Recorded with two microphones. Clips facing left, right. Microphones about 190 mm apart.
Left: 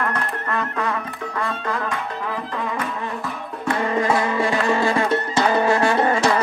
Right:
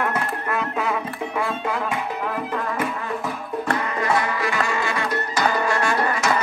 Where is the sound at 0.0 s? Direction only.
5° right (ahead or behind).